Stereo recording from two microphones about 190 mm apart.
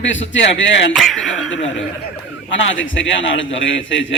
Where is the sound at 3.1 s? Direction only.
80° left.